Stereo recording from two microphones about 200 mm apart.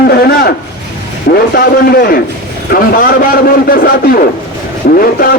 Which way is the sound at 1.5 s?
50° left (ahead or behind).